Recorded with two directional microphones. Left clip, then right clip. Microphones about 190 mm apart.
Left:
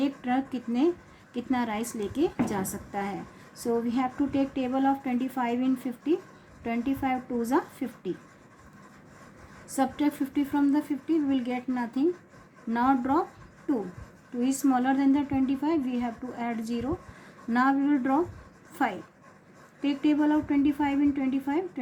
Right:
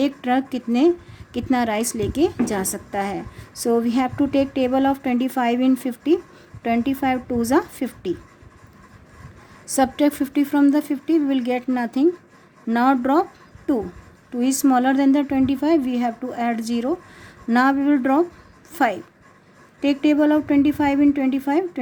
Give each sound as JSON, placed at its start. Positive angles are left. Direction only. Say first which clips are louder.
{"t": 0.0, "sound": "a woman's voice", "louder": "right 8 dB", "side_deg": -50}
{"t": 9.6, "sound": "a woman's voice", "louder": "right 9 dB", "side_deg": -50}